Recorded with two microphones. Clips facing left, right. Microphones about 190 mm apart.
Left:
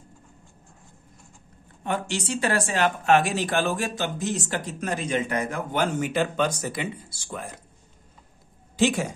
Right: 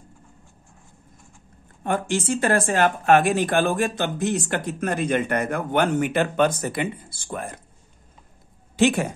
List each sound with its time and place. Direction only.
1.8 s a woman's voice: 50° right (ahead or behind)
8.7 s speech: 60° right (ahead or behind)